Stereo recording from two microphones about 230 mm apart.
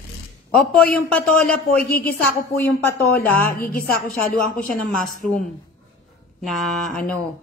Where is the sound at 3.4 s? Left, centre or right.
Left.